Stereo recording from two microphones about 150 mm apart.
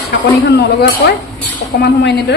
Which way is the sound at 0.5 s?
90° left.